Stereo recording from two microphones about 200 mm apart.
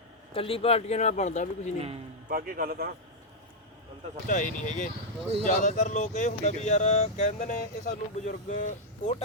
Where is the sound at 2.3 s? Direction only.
45° right (ahead or behind).